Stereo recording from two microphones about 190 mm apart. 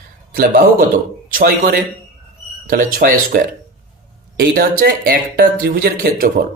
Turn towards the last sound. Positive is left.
turn(degrees=-50)  # may be behind; listen again after turning